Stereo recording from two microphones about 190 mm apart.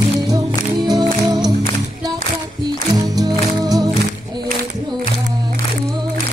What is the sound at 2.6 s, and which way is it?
Music, 20° right (ahead or behind).